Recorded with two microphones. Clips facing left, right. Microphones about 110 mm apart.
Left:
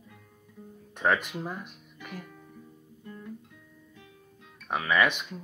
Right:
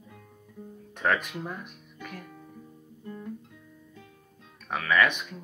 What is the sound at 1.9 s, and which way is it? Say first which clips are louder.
Music: even; 5° left (ahead or behind).